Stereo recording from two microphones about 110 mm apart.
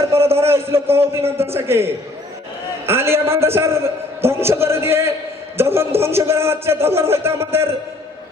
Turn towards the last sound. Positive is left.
turn(degrees=-25)  # may be behind; listen again after turning